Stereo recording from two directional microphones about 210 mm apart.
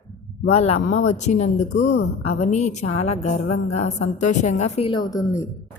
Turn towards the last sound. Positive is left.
turn(degrees=15)  # may be behind; listen again after turning